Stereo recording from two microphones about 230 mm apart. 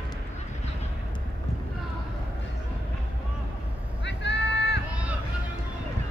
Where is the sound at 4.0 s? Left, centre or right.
Left.